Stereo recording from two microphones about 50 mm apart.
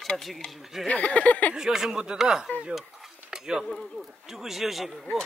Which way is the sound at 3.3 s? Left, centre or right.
Centre.